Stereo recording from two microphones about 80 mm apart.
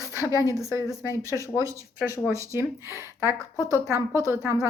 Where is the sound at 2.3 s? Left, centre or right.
Right.